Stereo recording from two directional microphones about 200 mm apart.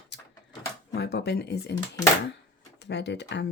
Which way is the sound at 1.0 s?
55° left (ahead or behind).